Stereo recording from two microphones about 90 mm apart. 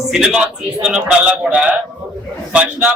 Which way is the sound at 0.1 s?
5° right (ahead or behind).